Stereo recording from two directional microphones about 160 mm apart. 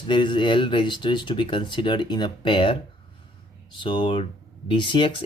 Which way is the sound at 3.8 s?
30° left (ahead or behind).